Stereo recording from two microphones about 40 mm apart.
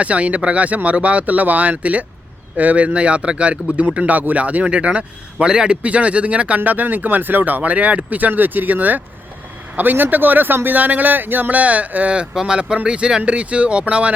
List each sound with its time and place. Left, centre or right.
0.0 s speech: right
3.9 s speech: right
5.8 s speech: right
6.6 s speech: right
8.3 s speech: right
10.8 s speech: right
12.5 s speech: right